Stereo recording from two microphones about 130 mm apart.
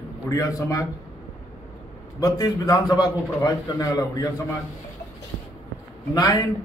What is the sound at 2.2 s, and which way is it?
A man's voice, 25° left (ahead or behind).